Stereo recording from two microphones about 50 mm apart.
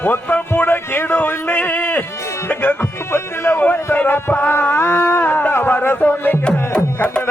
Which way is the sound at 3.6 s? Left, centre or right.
Left.